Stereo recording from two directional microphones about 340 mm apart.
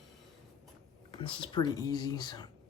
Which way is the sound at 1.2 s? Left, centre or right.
Centre.